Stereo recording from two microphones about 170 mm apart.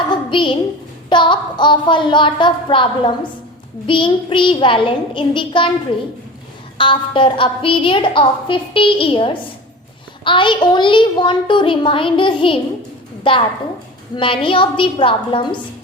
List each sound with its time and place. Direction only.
0.1 s a sound: 30° left (ahead or behind)
1.1 s a child's voice: 30° left (ahead or behind)
6.7 s a woman's voice: 30° left (ahead or behind)